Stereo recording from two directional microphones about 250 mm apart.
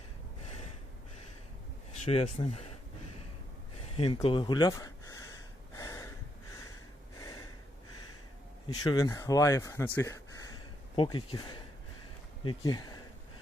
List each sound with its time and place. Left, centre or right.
2.0 s speech: left
3.9 s speech: left
5.7 s gasp: centre
7.2 s snort: centre
8.8 s speech: centre
10.9 s speech: centre